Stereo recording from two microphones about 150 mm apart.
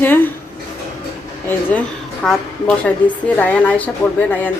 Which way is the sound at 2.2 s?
5° left (ahead or behind).